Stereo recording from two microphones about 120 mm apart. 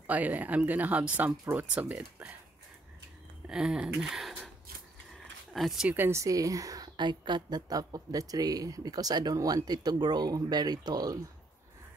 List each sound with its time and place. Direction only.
0.0 s speech: 15° right (ahead or behind)
3.4 s a sound: 5° right (ahead or behind)
5.5 s speech: centre (ahead or behind)
5.9 s a woman's voice: 20° right (ahead or behind)